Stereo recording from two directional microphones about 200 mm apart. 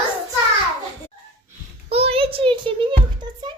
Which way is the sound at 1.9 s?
30° right (ahead or behind).